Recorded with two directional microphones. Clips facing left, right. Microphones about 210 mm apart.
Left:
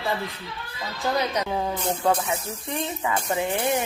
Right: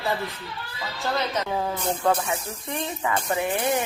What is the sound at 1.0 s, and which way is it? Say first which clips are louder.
Speech: left 2 dB; 15° left (ahead or behind).